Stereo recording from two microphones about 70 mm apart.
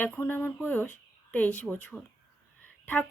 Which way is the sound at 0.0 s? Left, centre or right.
Left.